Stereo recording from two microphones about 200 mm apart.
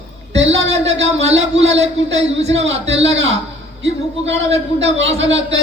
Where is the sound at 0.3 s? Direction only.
65° right (ahead or behind).